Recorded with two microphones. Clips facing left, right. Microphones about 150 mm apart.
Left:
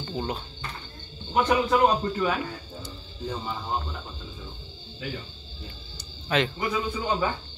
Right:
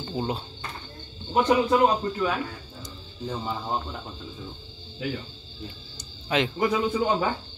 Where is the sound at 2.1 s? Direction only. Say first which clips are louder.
Even; 5° left (ahead or behind).